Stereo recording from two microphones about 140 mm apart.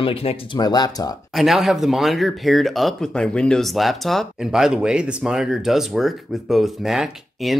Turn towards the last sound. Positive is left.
turn(degrees=0)  # may be behind; listen again after turning